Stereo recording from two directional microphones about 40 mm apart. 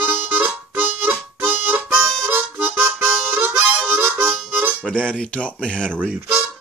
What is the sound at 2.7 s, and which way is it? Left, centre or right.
Harmonica, right.